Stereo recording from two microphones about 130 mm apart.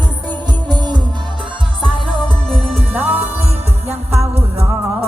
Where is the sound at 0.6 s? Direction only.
35° right (ahead or behind).